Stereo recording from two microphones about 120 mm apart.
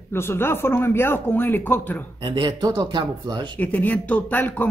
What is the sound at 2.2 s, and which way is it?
Speech, 40° right (ahead or behind).